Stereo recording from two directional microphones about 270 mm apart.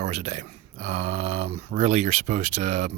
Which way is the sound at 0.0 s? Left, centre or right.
Right.